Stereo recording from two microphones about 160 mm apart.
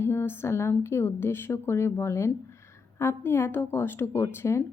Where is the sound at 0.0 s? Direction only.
15° left (ahead or behind).